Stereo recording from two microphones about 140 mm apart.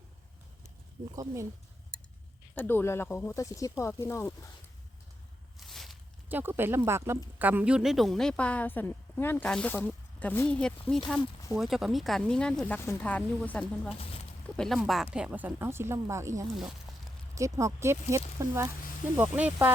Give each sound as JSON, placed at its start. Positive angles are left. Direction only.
{"t": 1.1, "sound": "speech", "side_deg": -25}
{"t": 2.6, "sound": "speech", "side_deg": 15}
{"t": 5.5, "sound": "a sound", "side_deg": 0}
{"t": 6.2, "sound": "a woman's voice", "side_deg": -15}
{"t": 17.3, "sound": "speech", "side_deg": -20}